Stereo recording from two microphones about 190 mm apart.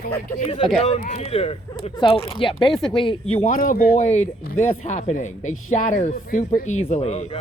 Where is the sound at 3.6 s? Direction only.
45° left (ahead or behind).